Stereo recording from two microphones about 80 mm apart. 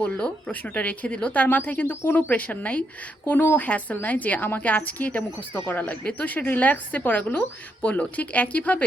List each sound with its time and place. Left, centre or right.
0.0 s a woman's voice: centre